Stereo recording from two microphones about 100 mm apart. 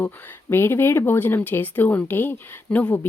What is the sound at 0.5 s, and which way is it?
Speech, 25° left (ahead or behind).